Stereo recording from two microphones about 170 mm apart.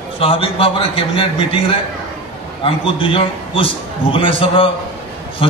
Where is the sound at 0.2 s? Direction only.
35° left (ahead or behind).